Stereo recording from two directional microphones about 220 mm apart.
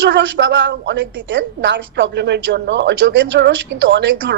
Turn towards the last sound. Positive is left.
turn(degrees=-55)  # may be behind; listen again after turning